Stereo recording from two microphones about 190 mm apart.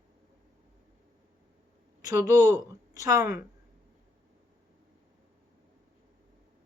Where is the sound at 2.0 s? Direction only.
15° right (ahead or behind).